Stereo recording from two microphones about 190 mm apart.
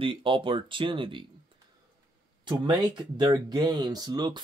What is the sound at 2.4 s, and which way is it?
Speech, 25° right (ahead or behind).